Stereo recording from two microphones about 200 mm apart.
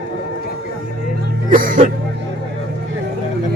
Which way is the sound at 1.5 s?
45° right (ahead or behind).